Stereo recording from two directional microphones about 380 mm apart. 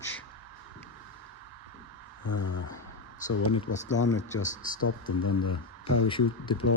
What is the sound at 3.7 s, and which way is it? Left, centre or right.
Speech, left.